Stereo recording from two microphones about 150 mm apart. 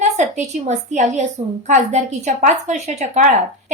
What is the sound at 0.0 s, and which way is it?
A woman's voice, 50° right (ahead or behind).